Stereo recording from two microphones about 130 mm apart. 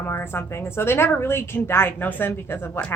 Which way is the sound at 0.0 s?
15° left (ahead or behind).